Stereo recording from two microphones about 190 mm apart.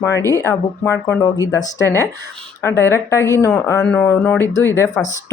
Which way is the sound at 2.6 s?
10° left (ahead or behind).